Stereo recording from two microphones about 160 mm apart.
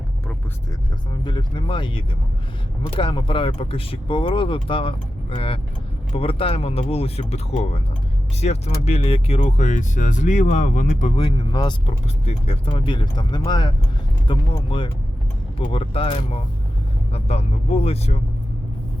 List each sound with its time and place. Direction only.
1.2 s speech: 30° left (ahead or behind); by 11.1 s 50° left (ahead or behind)
11.1 s speech: 30° left (ahead or behind)